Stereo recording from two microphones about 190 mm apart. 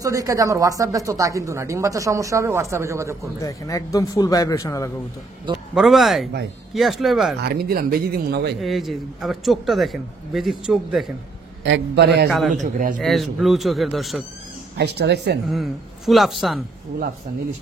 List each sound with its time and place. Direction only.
0.0 s speech: 15° right (ahead or behind)
3.3 s a man's voice: 15° left (ahead or behind)
5.8 s a man's voice: centre (ahead or behind)
7.4 s speech: 55° right (ahead or behind)
8.5 s a man's voice: centre (ahead or behind)
11.6 s speech: 70° right (ahead or behind)
12.5 s speech: 45° right (ahead or behind)
13.0 s a man's voice: centre (ahead or behind)
14.8 s speech: 60° right (ahead or behind)
15.5 s a man's voice: centre (ahead or behind)